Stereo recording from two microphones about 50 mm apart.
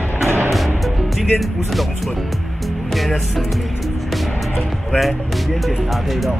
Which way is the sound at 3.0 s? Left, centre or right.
Centre.